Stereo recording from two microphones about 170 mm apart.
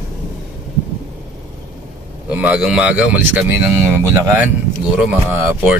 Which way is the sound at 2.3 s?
5° right (ahead or behind).